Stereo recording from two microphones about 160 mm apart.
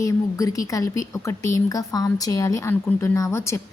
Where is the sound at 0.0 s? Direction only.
20° left (ahead or behind).